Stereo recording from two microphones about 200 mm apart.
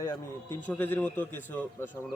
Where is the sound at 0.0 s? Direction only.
15° left (ahead or behind).